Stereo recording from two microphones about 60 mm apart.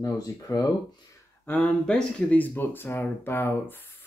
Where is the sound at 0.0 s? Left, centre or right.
Left.